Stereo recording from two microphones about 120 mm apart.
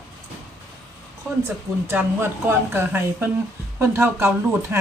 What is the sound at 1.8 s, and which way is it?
Speech, 20° right (ahead or behind).